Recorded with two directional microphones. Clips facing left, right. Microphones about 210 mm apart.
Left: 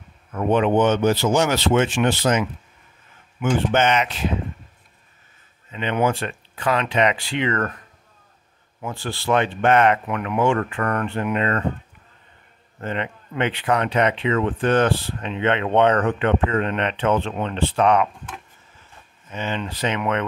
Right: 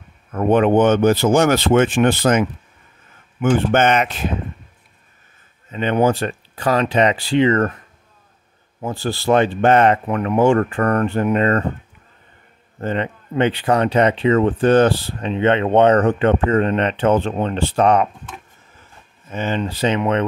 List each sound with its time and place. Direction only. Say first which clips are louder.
0.3 s speech: right 4 dB; 50° right (ahead or behind)
5.7 s speech: right 5 dB; 40° right (ahead or behind)
8.8 s speech: right 5 dB; 35° right (ahead or behind)
12.8 s speech: right 5 dB; 35° right (ahead or behind)
19.3 s speech: right 5 dB; 40° right (ahead or behind)